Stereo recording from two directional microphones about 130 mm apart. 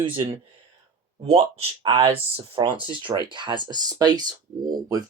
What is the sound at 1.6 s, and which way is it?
Speech, 45° right (ahead or behind).